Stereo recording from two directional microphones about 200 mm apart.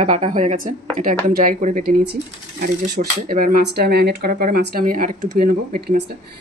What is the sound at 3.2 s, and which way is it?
Speech, 45° right (ahead or behind).